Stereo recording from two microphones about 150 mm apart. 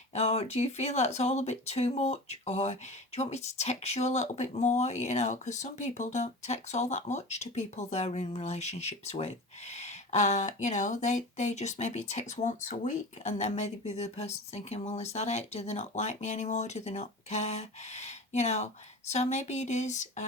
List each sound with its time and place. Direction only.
0.1 s speech: 45° left (ahead or behind)